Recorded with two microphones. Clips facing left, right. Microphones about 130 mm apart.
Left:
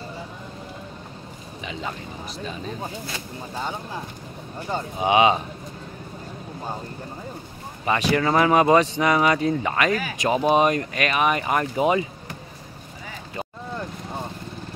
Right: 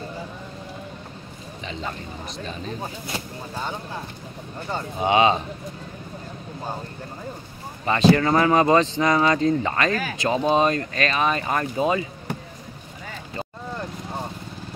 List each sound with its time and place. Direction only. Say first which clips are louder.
1.7 s speech: even; 10° left (ahead or behind)
4.7 s speech: even; 15° left (ahead or behind)
7.8 s speech: right 3 dB; 15° left (ahead or behind)